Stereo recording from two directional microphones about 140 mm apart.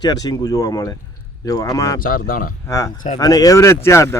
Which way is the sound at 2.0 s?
90° left.